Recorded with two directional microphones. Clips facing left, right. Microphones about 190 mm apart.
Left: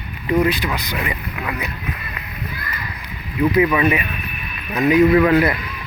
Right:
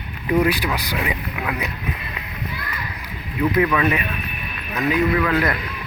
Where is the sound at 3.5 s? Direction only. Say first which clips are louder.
Left 3 dB; 15° left (ahead or behind).